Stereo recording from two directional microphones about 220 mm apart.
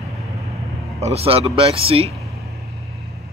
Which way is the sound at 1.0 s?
25° right (ahead or behind).